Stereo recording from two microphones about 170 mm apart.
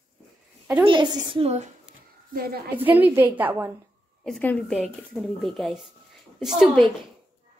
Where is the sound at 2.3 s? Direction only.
60° right (ahead or behind).